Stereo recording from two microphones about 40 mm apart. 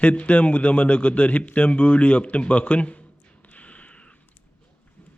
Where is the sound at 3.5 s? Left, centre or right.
Left.